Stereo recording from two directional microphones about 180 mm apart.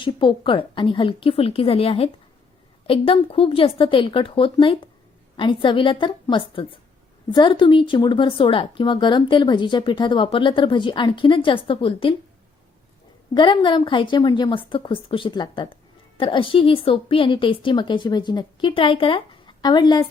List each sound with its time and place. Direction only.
0.0 s a woman's voice: 30° left (ahead or behind)
13.3 s a woman's voice: 25° left (ahead or behind)